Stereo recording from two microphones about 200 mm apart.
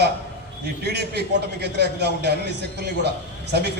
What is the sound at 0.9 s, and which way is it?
A man's voice, 55° right (ahead or behind).